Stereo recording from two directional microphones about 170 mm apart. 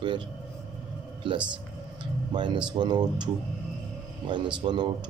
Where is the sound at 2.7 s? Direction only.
25° right (ahead or behind).